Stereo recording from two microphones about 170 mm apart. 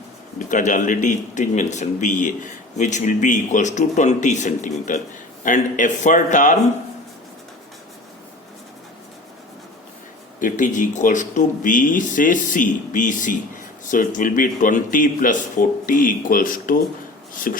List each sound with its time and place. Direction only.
0.3 s a man's voice: 50° left (ahead or behind)
10.4 s a man's voice: 50° left (ahead or behind)